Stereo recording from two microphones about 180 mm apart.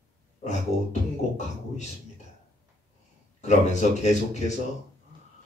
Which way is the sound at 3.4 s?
40° left (ahead or behind).